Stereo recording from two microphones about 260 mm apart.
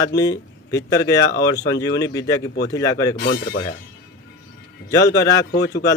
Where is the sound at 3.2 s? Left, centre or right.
Left.